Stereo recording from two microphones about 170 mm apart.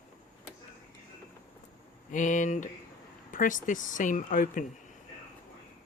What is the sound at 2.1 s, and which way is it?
Speech, 50° left (ahead or behind).